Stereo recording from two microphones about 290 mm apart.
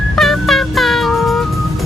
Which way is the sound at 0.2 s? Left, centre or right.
Centre.